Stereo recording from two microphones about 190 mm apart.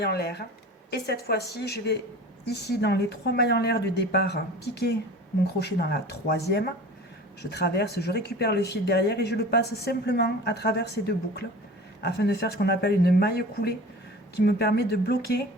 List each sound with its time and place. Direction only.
0.0 s speech: 60° left (ahead or behind)